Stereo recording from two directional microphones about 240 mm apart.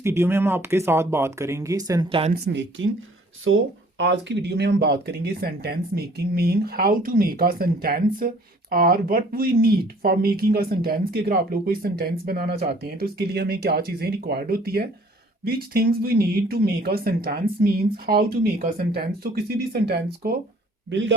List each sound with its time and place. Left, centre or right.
0.0 s speech: centre
2.3 s speech: right